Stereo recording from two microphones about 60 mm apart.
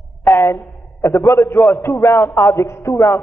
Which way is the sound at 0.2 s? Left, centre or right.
Left.